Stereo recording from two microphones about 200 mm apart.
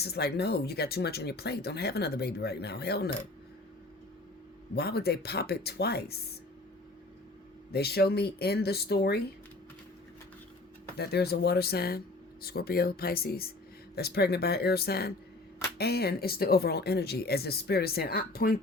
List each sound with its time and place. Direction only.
0.0 s speech: 55° left (ahead or behind)
4.7 s speech: 55° left (ahead or behind)
7.7 s speech: 50° left (ahead or behind)
10.9 s speech: 55° left (ahead or behind)